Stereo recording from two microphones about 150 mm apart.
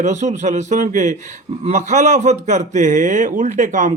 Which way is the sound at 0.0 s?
50° right (ahead or behind).